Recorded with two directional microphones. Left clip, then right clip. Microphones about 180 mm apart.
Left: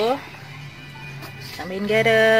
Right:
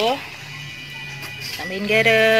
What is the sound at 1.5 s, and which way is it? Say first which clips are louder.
Speech: right 2 dB; 5° left (ahead or behind).